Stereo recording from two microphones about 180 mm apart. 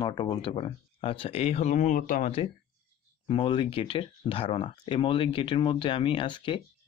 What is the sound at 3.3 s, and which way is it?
Speech, 30° left (ahead or behind).